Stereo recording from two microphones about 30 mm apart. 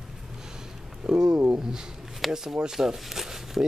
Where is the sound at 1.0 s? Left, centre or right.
Right.